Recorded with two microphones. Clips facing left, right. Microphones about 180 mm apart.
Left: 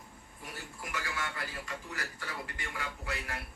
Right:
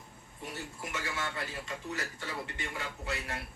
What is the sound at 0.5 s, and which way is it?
A man's voice, 25° right (ahead or behind).